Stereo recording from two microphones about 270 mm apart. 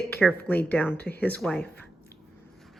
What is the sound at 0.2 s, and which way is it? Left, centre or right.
Speech, centre.